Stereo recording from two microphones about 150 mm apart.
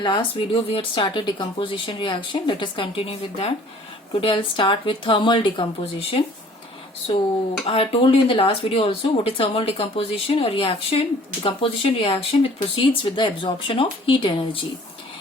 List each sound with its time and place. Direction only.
0.0 s speech: 30° left (ahead or behind)
7.6 s speech: 40° left (ahead or behind)